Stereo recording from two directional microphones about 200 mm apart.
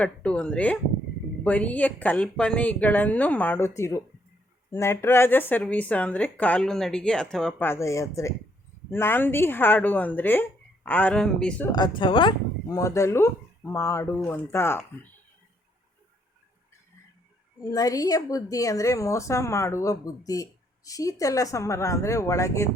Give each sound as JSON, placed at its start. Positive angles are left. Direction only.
{"t": 0.0, "sound": "a woman's voice", "side_deg": 5}
{"t": 11.7, "sound": "a woman's voice", "side_deg": 25}
{"t": 17.7, "sound": "a woman's voice", "side_deg": 20}